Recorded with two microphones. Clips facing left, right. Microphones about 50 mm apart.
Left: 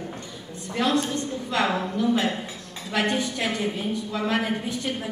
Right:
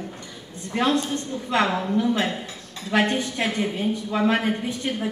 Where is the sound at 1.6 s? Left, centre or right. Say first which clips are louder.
Right 1 dB; centre.